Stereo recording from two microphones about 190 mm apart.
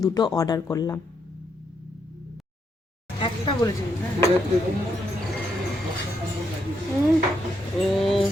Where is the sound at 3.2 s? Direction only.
25° left (ahead or behind).